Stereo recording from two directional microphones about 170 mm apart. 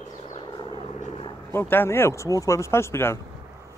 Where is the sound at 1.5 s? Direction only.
15° left (ahead or behind).